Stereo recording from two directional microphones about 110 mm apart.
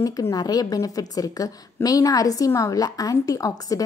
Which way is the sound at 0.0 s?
35° left (ahead or behind).